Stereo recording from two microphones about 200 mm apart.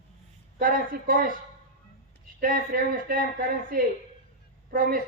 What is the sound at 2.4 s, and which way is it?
A man's voice, 45° right (ahead or behind).